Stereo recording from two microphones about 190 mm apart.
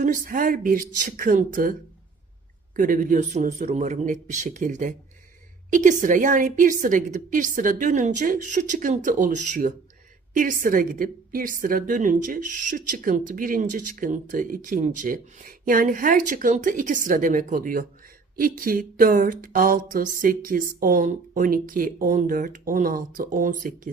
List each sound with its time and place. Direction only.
0.0 s a woman's voice: 45° right (ahead or behind)
2.7 s a woman's voice: 45° right (ahead or behind)